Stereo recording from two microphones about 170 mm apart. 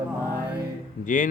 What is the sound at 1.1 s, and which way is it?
Speech, 50° left (ahead or behind).